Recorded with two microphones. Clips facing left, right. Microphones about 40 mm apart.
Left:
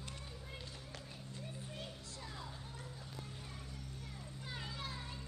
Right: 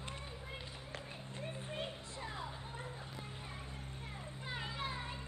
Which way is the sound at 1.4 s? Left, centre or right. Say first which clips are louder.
Right 6 dB; right.